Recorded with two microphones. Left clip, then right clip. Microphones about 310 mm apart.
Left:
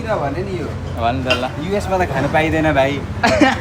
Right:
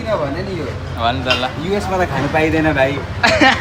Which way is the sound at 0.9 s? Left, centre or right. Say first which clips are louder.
Right 1 dB; centre.